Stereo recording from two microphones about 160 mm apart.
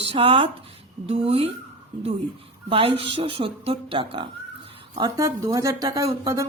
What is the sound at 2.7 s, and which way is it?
A woman's voice, 35° right (ahead or behind).